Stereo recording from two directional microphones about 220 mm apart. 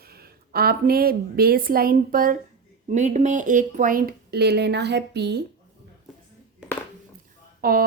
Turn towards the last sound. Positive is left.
turn(degrees=-40)  # may be behind; listen again after turning